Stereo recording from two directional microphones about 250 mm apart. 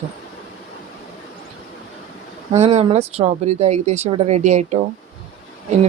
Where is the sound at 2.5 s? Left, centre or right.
Right.